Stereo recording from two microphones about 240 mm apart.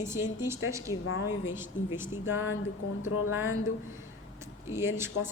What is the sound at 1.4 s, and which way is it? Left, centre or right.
Speech, centre.